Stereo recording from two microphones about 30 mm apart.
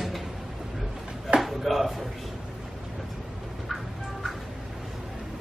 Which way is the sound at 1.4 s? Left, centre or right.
Centre.